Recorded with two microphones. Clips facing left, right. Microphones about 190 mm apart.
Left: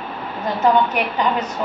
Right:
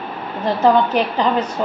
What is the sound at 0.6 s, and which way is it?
Speech, 30° right (ahead or behind).